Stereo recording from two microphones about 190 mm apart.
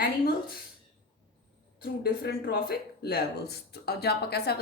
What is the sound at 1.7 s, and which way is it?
Speech, 55° left (ahead or behind).